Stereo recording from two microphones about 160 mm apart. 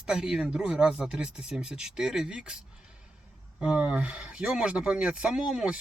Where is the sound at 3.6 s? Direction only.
5° right (ahead or behind).